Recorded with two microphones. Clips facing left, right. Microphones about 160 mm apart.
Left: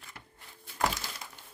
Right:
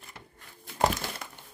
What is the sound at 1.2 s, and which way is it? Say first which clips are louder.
Crumpling: right 3 dB; 60° right (ahead or behind).